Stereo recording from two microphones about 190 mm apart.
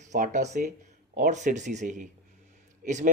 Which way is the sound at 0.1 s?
40° right (ahead or behind).